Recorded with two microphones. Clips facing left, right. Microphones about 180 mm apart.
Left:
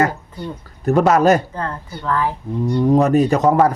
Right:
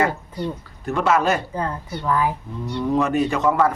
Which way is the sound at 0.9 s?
40° left (ahead or behind).